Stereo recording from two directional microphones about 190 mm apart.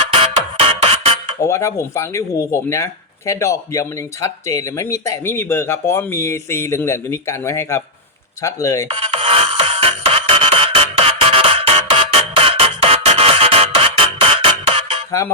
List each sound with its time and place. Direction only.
0.0 s music: 30° right (ahead or behind)
1.5 s speech: 15° left (ahead or behind)
8.9 s music: 30° right (ahead or behind)